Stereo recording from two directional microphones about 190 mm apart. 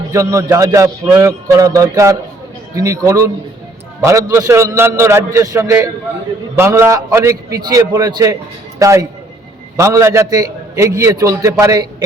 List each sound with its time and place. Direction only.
0.1 s a man's voice: 15° right (ahead or behind)